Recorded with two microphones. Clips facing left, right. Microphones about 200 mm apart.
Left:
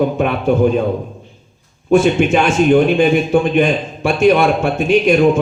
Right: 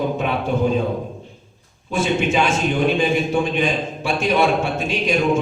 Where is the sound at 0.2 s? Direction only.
55° left (ahead or behind).